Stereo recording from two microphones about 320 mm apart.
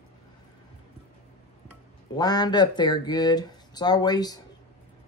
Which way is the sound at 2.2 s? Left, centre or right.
Centre.